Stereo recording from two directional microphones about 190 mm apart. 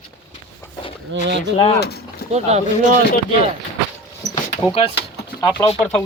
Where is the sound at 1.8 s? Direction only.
60° left (ahead or behind).